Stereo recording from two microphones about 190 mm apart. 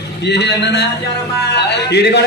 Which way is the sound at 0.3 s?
65° left (ahead or behind).